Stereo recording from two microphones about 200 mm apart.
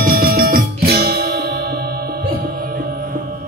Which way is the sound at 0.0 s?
50° right (ahead or behind).